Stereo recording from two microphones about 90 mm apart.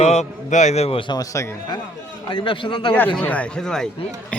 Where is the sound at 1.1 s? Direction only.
40° left (ahead or behind).